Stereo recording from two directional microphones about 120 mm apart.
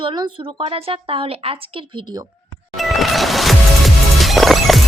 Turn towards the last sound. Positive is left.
turn(degrees=0)  # may be behind; listen again after turning